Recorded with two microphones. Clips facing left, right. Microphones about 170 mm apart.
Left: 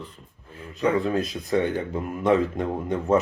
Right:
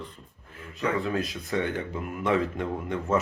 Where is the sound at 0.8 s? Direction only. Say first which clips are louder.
Left 5 dB; 35° left (ahead or behind).